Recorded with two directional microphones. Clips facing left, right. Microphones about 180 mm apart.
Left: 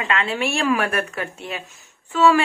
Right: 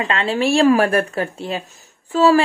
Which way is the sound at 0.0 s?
30° right (ahead or behind).